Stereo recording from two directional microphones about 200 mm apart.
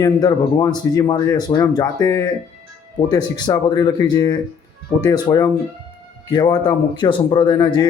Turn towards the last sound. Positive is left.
turn(degrees=20)  # may be behind; listen again after turning